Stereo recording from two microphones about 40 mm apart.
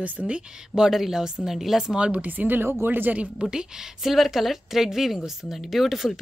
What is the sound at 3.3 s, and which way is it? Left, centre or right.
A woman's voice, centre.